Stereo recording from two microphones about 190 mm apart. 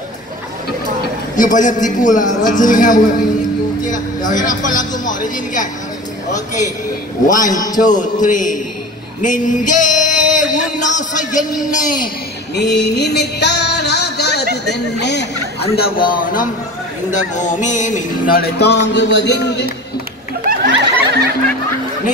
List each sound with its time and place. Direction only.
1.3 s a man's voice: 40° left (ahead or behind)
9.2 s a sound: 40° left (ahead or behind)
12.5 s music: 65° left (ahead or behind)
15.8 s a man's voice: 50° left (ahead or behind)
17.1 s music: 40° left (ahead or behind); by 19.7 s 65° left (ahead or behind)
20.4 s snicker: 50° right (ahead or behind)